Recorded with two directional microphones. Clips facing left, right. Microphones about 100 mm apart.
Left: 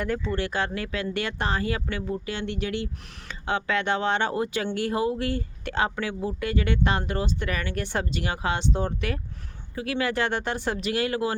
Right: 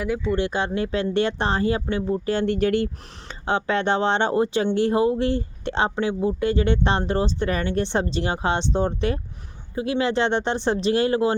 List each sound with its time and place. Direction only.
0.3 s speech: 20° right (ahead or behind)
2.3 s speech: 45° right (ahead or behind)
3.2 s speech: 30° right (ahead or behind)